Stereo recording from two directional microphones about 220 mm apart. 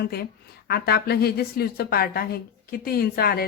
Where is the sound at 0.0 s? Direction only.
45° left (ahead or behind).